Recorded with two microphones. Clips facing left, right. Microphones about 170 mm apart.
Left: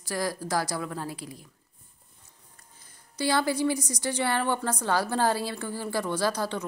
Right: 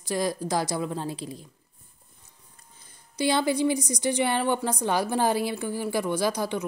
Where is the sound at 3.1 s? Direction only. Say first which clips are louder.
Right 2 dB; 20° right (ahead or behind).